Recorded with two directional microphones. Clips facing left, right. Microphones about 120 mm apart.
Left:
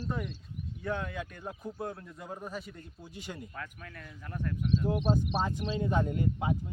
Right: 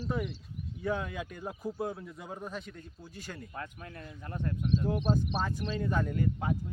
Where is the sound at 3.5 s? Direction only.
25° right (ahead or behind).